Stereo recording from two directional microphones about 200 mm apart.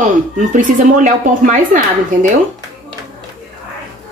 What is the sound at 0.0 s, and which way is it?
Speech, 40° right (ahead or behind).